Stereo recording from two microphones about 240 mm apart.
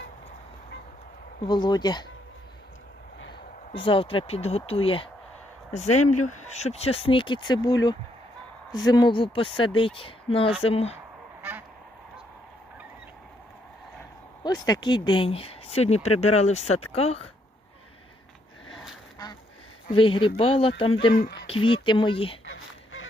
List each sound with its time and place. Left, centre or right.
1.5 s speech: centre
3.7 s speech: left
14.4 s speech: centre
19.9 s speech: left
22.4 s a sound: left